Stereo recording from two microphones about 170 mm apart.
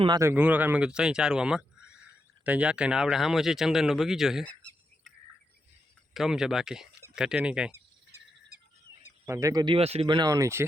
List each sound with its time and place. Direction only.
0.2 s speech: 10° right (ahead or behind)
6.1 s speech: centre (ahead or behind)
9.2 s speech: 15° right (ahead or behind); by 10.2 s 35° right (ahead or behind)
10.2 s speech: 20° right (ahead or behind)